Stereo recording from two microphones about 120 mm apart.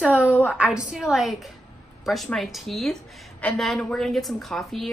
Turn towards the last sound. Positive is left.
turn(degrees=0)  # may be behind; listen again after turning